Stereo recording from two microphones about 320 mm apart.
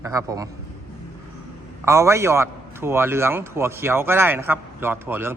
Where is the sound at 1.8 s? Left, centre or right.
Centre.